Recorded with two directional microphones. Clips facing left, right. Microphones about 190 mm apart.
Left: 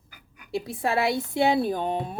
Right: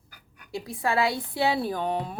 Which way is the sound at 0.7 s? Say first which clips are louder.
Even; 25° left (ahead or behind).